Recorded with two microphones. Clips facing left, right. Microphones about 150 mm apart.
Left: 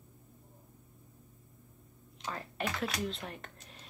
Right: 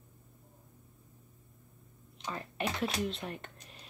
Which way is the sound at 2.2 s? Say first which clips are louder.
Right 1 dB; centre (ahead or behind).